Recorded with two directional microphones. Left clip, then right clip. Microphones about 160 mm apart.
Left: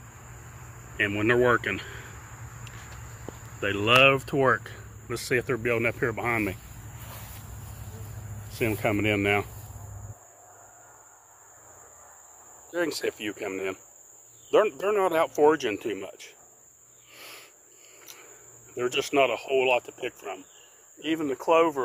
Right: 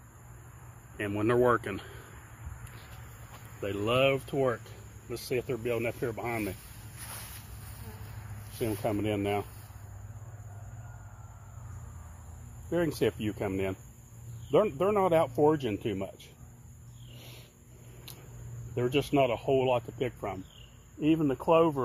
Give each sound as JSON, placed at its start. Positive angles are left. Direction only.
{"t": 0.9, "sound": "speech", "side_deg": -5}
{"t": 3.6, "sound": "speech", "side_deg": 0}
{"t": 8.5, "sound": "speech", "side_deg": 5}
{"t": 12.8, "sound": "speech", "side_deg": 10}
{"t": 18.9, "sound": "speech", "side_deg": 10}
{"t": 21.1, "sound": "speech", "side_deg": 20}